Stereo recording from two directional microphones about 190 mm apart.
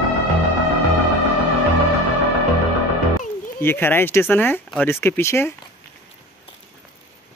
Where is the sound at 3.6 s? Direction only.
10° left (ahead or behind).